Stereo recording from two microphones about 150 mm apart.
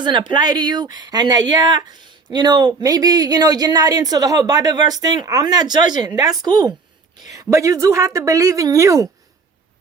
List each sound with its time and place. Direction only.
0.0 s speech: 30° right (ahead or behind)